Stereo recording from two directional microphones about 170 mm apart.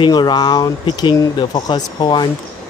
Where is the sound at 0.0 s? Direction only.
25° left (ahead or behind).